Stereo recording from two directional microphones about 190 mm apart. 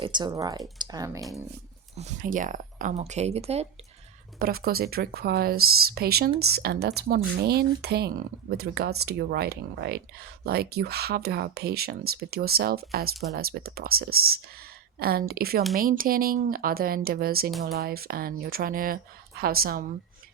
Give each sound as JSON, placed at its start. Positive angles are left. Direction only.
{"t": 0.0, "sound": "speech", "side_deg": -25}
{"t": 2.0, "sound": "speech", "side_deg": -40}
{"t": 4.4, "sound": "speech", "side_deg": -50}